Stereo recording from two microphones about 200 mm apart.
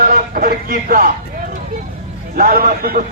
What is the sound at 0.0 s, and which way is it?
Speech, 45° right (ahead or behind).